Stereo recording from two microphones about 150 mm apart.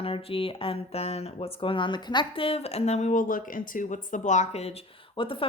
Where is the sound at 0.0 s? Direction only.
40° left (ahead or behind).